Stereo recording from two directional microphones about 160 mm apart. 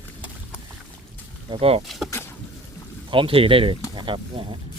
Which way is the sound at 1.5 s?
35° right (ahead or behind).